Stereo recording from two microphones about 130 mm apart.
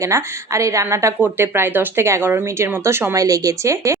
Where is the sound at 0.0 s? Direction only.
25° right (ahead or behind).